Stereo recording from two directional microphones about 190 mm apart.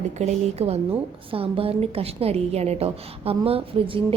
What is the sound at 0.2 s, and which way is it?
A woman's voice, 35° right (ahead or behind).